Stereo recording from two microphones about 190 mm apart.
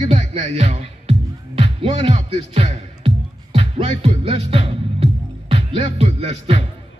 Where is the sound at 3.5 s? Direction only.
35° right (ahead or behind).